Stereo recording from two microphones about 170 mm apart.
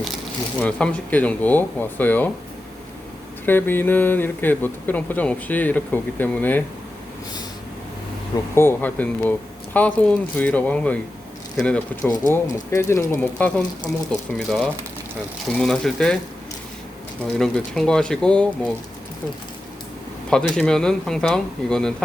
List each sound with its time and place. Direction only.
0.6 s speech: 5° left (ahead or behind)
3.4 s speech: 10° left (ahead or behind)
8.5 s speech: 10° left (ahead or behind)
12.3 s speech: 15° left (ahead or behind)
14.1 s speech: 5° left (ahead or behind)
17.2 s speech: 5° left (ahead or behind)
20.3 s speech: 5° left (ahead or behind)